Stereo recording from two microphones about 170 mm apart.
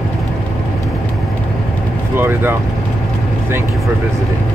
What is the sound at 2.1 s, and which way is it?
Speech, 15° right (ahead or behind).